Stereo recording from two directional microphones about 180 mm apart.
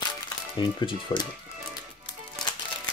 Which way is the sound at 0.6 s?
25° left (ahead or behind).